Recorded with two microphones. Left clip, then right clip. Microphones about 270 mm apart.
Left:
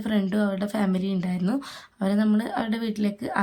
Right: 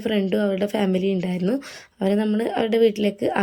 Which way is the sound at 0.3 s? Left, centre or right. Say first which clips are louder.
Right 5 dB; centre.